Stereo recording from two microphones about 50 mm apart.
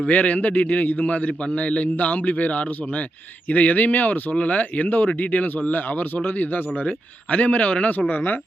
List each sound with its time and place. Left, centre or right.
0.1 s a man's voice: left